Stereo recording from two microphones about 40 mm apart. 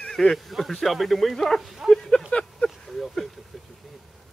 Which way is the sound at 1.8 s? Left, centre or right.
Centre.